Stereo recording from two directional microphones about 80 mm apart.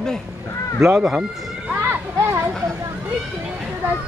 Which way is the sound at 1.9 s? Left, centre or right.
Right.